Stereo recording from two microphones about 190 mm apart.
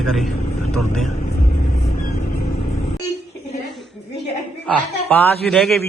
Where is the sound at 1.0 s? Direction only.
40° left (ahead or behind).